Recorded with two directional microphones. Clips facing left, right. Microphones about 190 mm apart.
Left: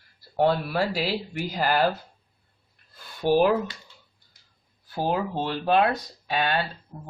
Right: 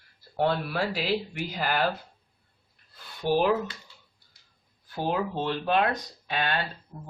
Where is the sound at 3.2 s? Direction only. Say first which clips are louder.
Left 4 dB; 45° left (ahead or behind).